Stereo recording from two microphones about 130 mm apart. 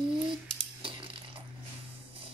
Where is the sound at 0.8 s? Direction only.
40° right (ahead or behind).